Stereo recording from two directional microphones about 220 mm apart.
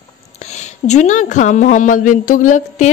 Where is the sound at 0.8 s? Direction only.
30° left (ahead or behind).